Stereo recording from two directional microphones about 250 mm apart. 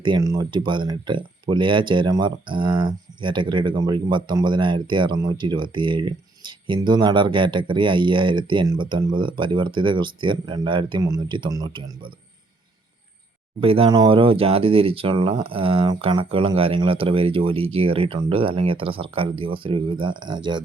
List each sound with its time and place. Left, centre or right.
0.0 s speech: centre
13.6 s speech: right